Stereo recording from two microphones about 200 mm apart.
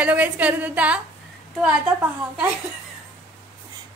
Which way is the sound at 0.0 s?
5° right (ahead or behind).